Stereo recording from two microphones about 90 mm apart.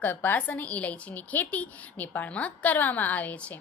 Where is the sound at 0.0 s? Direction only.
20° left (ahead or behind).